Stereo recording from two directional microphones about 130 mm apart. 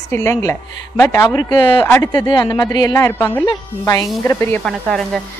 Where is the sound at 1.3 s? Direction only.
35° left (ahead or behind).